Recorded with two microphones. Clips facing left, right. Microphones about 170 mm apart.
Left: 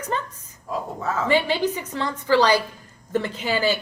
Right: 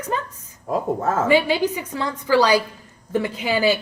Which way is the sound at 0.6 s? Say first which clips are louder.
Right 6 dB; 50° right (ahead or behind).